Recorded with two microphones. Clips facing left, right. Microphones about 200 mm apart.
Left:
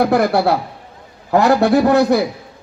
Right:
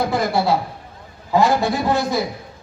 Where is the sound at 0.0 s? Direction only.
65° left (ahead or behind).